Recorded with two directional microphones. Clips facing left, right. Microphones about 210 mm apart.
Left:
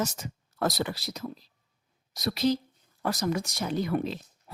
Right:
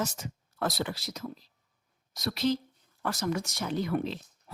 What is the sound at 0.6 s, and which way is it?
A woman's voice, 40° left (ahead or behind).